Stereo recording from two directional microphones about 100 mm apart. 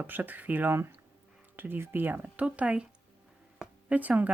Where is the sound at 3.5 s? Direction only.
10° right (ahead or behind).